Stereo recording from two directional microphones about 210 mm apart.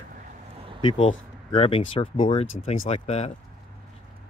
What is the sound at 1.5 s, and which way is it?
Speech, 25° left (ahead or behind).